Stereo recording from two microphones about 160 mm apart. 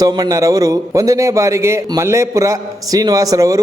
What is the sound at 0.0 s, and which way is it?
A man's voice, 25° right (ahead or behind).